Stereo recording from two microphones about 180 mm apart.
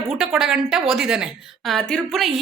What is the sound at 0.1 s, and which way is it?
A woman's voice, centre (ahead or behind).